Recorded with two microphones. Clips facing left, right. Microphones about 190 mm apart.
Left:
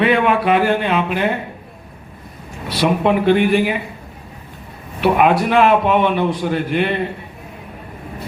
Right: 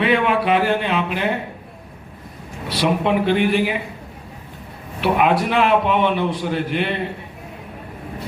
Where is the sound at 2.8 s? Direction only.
50° left (ahead or behind).